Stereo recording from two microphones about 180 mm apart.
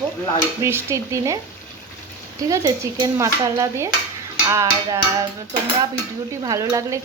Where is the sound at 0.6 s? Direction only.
15° right (ahead or behind).